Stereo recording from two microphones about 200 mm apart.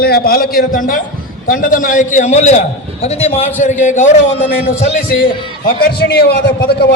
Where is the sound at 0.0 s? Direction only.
50° left (ahead or behind).